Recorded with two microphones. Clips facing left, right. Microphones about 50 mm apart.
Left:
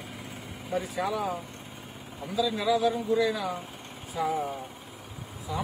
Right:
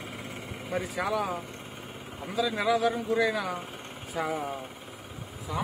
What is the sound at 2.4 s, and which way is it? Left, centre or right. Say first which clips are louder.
A man's voice: even; right.